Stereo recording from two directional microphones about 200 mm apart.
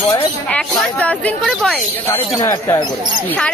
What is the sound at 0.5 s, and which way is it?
Speech, 5° left (ahead or behind).